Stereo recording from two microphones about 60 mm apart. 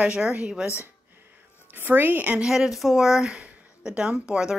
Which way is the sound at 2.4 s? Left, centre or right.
Centre.